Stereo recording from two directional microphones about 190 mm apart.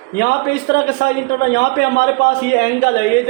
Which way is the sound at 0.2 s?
55° left (ahead or behind).